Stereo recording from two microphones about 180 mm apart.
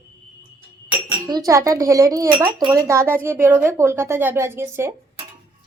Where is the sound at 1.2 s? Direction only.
20° right (ahead or behind).